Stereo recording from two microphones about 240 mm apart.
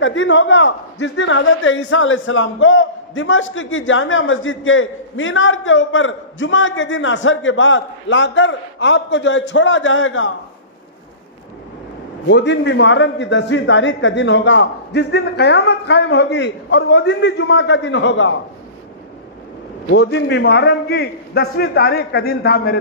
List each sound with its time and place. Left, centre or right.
0.0 s a man's voice: left
12.3 s a man's voice: left
19.9 s a man's voice: left